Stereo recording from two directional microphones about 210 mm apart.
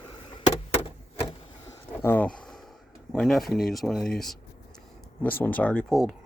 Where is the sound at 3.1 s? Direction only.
Centre (ahead or behind).